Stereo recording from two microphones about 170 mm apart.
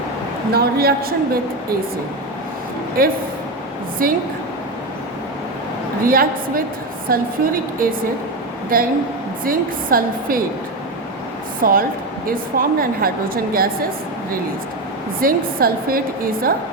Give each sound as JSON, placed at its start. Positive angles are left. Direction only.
{"t": 0.5, "sound": "speech", "side_deg": -65}
{"t": 3.0, "sound": "speech", "side_deg": -60}
{"t": 6.1, "sound": "speech", "side_deg": -55}
{"t": 11.6, "sound": "speech", "side_deg": -55}
{"t": 15.2, "sound": "speech", "side_deg": -60}